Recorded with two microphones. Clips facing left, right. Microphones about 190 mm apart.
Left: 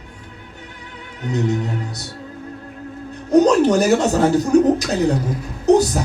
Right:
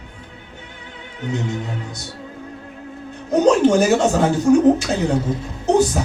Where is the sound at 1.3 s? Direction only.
40° left (ahead or behind).